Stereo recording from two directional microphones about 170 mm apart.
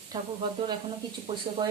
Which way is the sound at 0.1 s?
25° right (ahead or behind).